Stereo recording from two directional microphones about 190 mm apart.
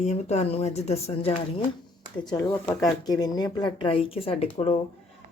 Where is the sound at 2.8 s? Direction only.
20° left (ahead or behind).